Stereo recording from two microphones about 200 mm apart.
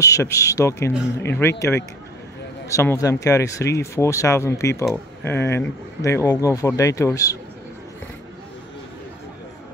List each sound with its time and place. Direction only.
0.0 s speech: 15° left (ahead or behind)